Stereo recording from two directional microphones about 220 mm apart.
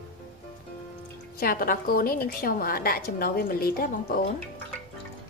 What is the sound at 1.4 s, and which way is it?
A woman's voice, 40° left (ahead or behind).